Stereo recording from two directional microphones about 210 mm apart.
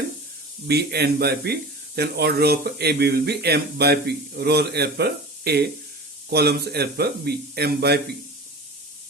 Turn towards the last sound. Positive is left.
turn(degrees=-50)  # may be behind; listen again after turning